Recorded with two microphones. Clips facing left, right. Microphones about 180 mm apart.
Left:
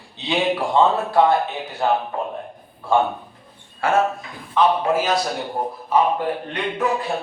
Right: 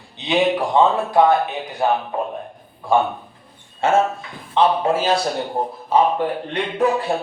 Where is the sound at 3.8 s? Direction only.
25° right (ahead or behind).